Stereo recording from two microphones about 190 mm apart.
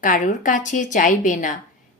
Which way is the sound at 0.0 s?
45° left (ahead or behind).